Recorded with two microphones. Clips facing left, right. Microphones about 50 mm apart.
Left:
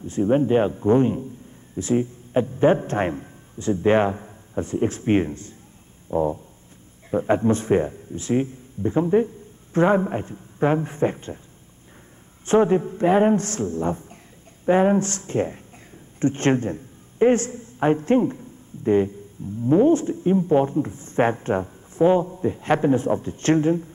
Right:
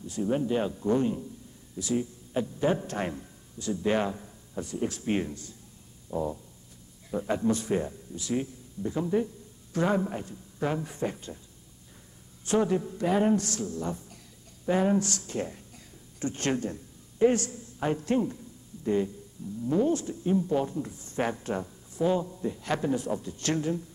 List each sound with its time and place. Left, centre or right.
0.0 s a man's voice: left
6.0 s a sound: left
7.1 s speech: left
12.4 s speech: left